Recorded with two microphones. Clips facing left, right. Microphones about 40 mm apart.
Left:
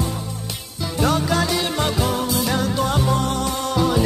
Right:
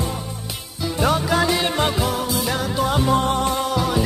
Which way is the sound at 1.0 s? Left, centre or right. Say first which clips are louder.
Right 1 dB; centre.